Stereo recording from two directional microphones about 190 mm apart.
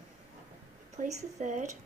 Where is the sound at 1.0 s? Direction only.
40° right (ahead or behind).